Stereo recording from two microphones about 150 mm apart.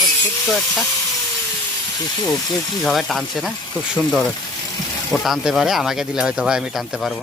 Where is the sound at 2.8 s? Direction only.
Centre (ahead or behind).